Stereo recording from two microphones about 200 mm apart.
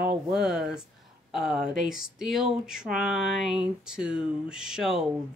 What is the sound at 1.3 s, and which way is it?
Speech, centre (ahead or behind).